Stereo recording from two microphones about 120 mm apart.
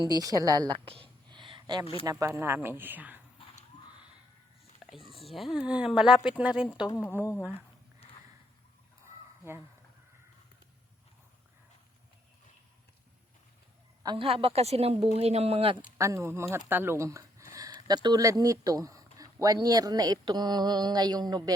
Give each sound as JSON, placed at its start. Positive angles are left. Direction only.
{"t": 0.0, "sound": "a woman's voice", "side_deg": -30}
{"t": 0.9, "sound": "a sound", "side_deg": -50}
{"t": 2.0, "sound": "speech", "side_deg": -25}
{"t": 4.8, "sound": "cat", "side_deg": 0}
{"t": 5.5, "sound": "speech", "side_deg": -10}
{"t": 9.5, "sound": "speech", "side_deg": -20}
{"t": 14.0, "sound": "a woman's voice", "side_deg": -35}
{"t": 14.3, "sound": "speech", "side_deg": -55}
{"t": 16.0, "sound": "speech", "side_deg": -25}